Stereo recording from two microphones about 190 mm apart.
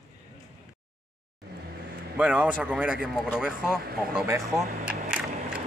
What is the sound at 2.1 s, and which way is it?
Speech, 5° right (ahead or behind).